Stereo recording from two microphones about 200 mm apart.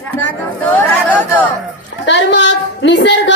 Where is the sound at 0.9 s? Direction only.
10° left (ahead or behind).